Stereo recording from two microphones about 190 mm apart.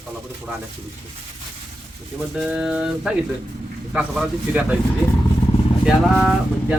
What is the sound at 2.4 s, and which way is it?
Speech, 5° right (ahead or behind).